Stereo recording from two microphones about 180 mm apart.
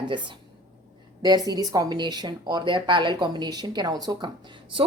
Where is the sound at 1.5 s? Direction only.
20° right (ahead or behind).